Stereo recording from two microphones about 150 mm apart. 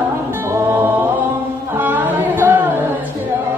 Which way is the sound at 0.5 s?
15° right (ahead or behind).